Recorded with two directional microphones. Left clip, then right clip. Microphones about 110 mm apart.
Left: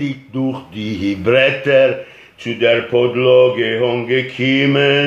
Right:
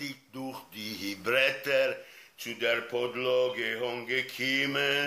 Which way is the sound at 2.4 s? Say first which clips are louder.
Left 15 dB; 30° right (ahead or behind).